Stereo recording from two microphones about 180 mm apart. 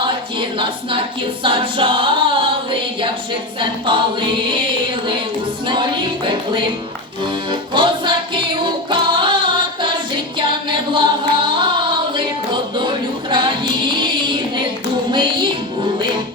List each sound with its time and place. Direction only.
0.0 s a capella: 25° right (ahead or behind)
3.6 s a capella: 25° right (ahead or behind)
5.6 s a capella: 25° right (ahead or behind)
7.7 s music: 25° right (ahead or behind)
11.4 s singing: 25° right (ahead or behind)
13.3 s music: 25° right (ahead or behind)